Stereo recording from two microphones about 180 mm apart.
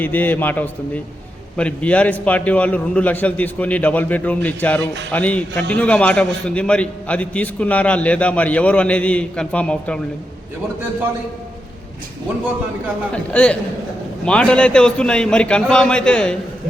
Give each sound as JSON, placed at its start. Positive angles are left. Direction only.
{"t": 0.0, "sound": "a man's voice", "side_deg": 10}
{"t": 13.1, "sound": "a man's voice", "side_deg": 5}